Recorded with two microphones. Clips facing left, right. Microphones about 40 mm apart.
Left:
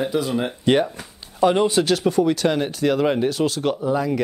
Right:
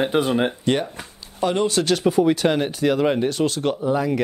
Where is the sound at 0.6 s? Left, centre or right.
Centre.